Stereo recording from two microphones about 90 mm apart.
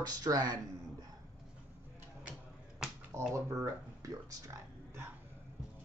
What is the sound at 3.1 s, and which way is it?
Speech, 30° right (ahead or behind).